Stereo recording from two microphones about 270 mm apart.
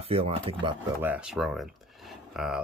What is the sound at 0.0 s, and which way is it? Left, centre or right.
Speech, right.